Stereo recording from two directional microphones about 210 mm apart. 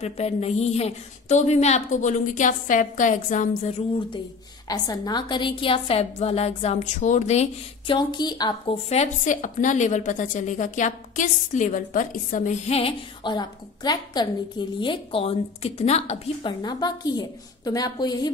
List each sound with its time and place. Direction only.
0.0 s a woman's voice: 30° left (ahead or behind)
4.6 s a woman's voice: 20° left (ahead or behind)
16.6 s a woman's voice: 20° left (ahead or behind)